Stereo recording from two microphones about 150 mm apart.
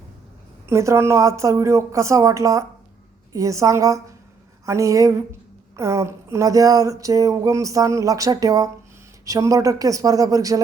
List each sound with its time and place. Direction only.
0.7 s a woman's voice: 20° right (ahead or behind)